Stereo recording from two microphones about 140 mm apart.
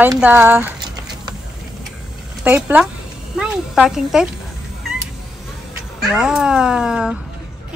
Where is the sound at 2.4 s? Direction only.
10° right (ahead or behind).